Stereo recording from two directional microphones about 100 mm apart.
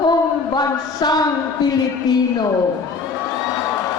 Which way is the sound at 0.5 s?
45° left (ahead or behind).